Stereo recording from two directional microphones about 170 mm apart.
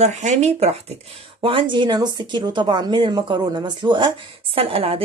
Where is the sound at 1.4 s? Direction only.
30° right (ahead or behind).